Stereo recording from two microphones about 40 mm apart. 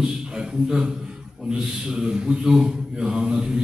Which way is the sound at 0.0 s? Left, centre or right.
Centre.